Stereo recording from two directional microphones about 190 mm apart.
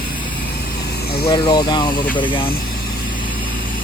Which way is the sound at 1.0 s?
55° left (ahead or behind).